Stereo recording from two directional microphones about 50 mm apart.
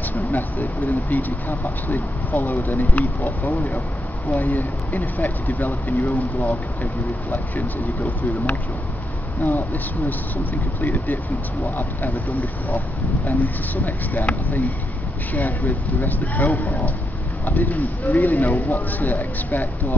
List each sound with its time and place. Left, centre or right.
0.1 s speech: left